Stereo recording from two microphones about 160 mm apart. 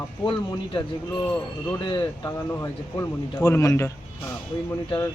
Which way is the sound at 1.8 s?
25° left (ahead or behind).